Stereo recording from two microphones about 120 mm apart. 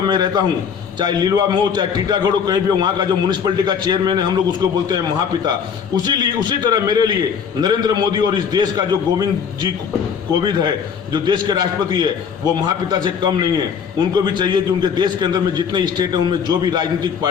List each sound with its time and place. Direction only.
0.1 s a man's voice: 35° right (ahead or behind)
6.0 s a man's voice: 35° right (ahead or behind)
10.4 s a man's voice: 35° right (ahead or behind)